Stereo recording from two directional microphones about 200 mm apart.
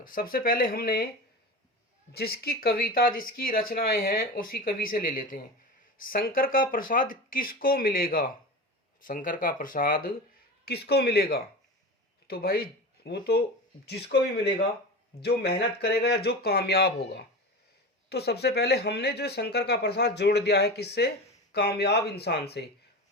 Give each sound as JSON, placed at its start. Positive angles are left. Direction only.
{"t": 0.0, "sound": "speech", "side_deg": 45}
{"t": 2.1, "sound": "speech", "side_deg": 50}
{"t": 15.2, "sound": "speech", "side_deg": 55}